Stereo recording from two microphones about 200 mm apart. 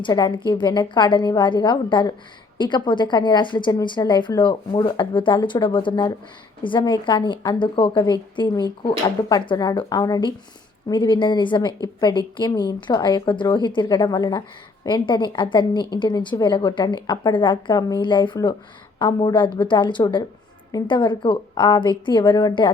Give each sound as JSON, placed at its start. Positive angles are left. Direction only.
{"t": 0.0, "sound": "a woman's voice", "side_deg": 25}